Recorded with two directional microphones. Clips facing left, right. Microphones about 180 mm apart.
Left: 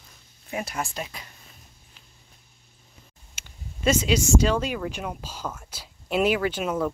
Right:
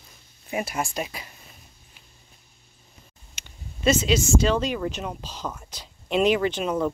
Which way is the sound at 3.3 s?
10° left (ahead or behind).